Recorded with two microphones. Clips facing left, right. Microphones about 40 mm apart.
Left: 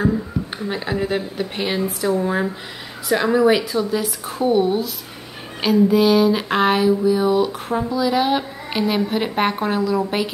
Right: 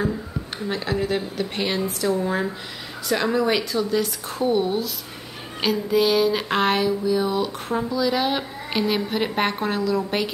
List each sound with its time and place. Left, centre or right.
0.7 s speech: centre